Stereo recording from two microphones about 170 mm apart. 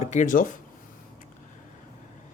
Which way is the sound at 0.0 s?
45° left (ahead or behind).